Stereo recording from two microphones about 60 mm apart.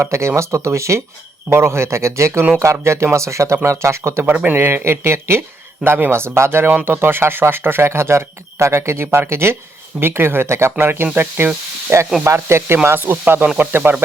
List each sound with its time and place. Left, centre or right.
0.0 s speech: right
4.3 s speech: right